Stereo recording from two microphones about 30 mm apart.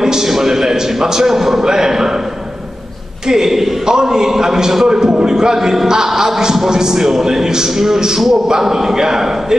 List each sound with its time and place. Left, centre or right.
0.0 s a sound: centre
0.3 s a man's voice: centre
3.3 s a man's voice: centre